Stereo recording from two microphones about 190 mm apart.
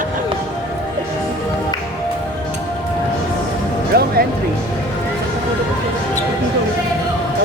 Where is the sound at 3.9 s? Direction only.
55° right (ahead or behind).